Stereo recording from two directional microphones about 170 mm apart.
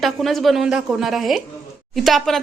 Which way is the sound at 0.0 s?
Centre (ahead or behind).